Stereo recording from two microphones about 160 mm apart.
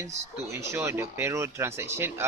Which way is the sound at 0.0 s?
15° right (ahead or behind).